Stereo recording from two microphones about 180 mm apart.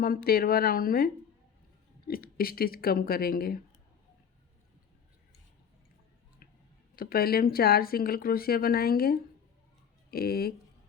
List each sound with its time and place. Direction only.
0.0 s speech: 55° left (ahead or behind)
6.9 s speech: 55° left (ahead or behind)